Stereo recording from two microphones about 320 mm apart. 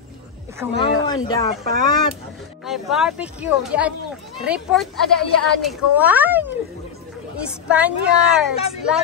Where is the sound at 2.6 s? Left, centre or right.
Centre.